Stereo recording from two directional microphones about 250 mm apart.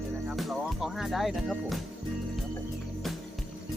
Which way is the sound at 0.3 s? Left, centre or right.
Centre.